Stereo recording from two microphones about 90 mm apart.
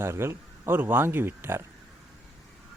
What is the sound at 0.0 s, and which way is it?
Speech, 30° right (ahead or behind).